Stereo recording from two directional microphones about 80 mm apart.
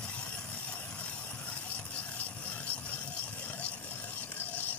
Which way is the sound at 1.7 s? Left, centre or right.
Left.